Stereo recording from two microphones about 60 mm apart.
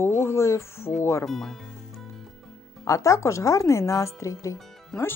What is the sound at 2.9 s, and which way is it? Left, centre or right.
Speech, left.